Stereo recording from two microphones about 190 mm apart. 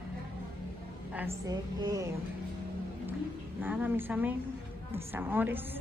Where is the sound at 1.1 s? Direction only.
15° right (ahead or behind).